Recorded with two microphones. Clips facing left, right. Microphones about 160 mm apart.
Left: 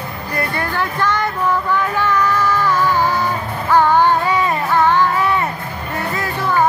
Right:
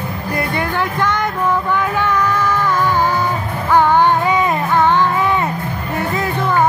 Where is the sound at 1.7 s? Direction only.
15° right (ahead or behind).